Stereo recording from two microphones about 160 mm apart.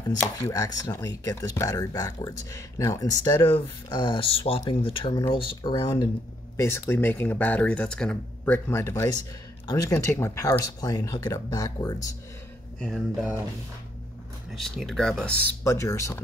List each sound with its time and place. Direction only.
0.1 s speech: 25° left (ahead or behind)
6.5 s speech: 15° left (ahead or behind)
12.8 s speech: centre (ahead or behind)
14.5 s speech: centre (ahead or behind)
15.6 s speech: 20° left (ahead or behind)